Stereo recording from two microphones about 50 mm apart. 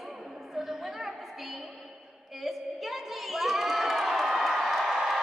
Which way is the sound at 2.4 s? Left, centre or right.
Centre.